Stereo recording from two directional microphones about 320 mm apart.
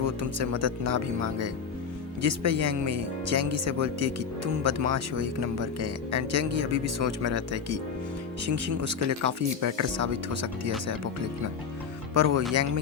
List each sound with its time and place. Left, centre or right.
0.0 s speech: right
12.1 s speech: right